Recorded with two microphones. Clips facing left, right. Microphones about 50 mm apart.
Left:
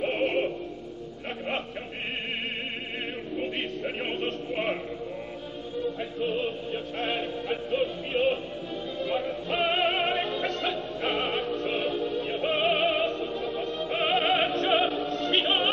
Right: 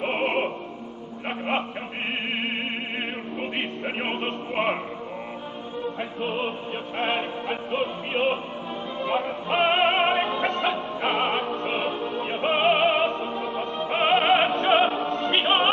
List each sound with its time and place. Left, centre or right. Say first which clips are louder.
0.0 s music: right 2 dB; right
3.3 s music: even; right
5.8 s opera: even; right
7.0 s music: right 5 dB; right